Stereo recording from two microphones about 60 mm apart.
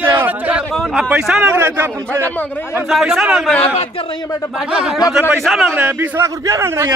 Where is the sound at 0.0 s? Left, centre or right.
Right.